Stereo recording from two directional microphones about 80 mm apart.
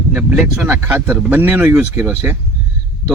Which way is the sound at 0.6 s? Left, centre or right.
Right.